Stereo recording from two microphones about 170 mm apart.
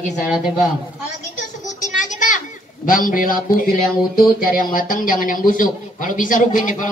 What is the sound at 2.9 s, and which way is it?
Speech, 55° left (ahead or behind).